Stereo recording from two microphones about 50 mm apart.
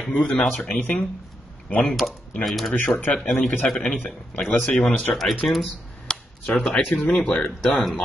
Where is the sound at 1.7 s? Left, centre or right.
Left.